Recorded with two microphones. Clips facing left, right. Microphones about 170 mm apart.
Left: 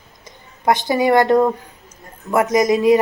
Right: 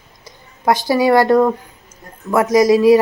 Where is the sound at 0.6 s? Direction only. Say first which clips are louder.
Right 2 dB; 20° left (ahead or behind).